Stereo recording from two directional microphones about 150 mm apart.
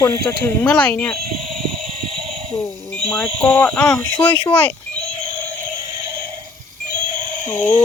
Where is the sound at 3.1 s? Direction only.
5° left (ahead or behind).